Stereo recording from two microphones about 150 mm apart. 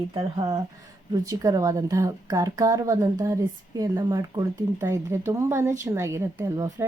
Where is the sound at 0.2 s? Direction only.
30° right (ahead or behind).